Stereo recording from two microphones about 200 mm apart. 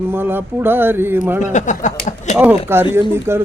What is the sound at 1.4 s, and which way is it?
Speech, 40° left (ahead or behind).